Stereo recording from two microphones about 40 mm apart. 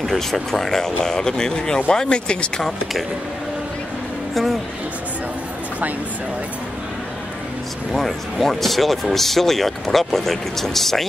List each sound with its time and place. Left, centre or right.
0.0 s speech: centre; by 2.6 s left
7.9 s speech: centre